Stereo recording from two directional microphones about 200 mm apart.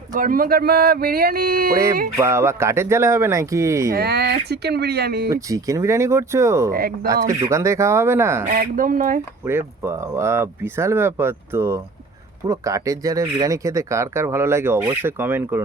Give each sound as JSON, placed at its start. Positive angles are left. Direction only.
{"t": 0.1, "sound": "speech", "side_deg": -40}
{"t": 1.7, "sound": "speech", "side_deg": -15}
{"t": 3.9, "sound": "speech", "side_deg": -55}
{"t": 5.3, "sound": "speech", "side_deg": -15}
{"t": 8.4, "sound": "speech", "side_deg": -45}
{"t": 9.4, "sound": "speech", "side_deg": -10}